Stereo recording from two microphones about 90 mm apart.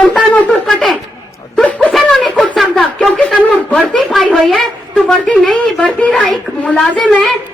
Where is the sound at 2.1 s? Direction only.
Centre (ahead or behind).